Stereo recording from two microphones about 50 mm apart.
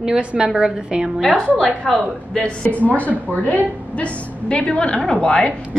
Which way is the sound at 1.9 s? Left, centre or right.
Centre.